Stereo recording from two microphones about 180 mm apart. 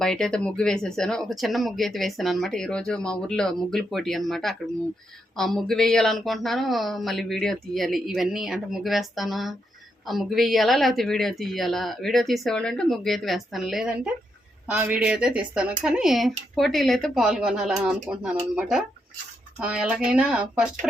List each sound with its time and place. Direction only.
0.0 s speech: 5° left (ahead or behind)